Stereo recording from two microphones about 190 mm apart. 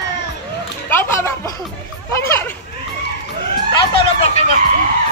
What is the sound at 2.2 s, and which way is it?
Speech, 10° left (ahead or behind).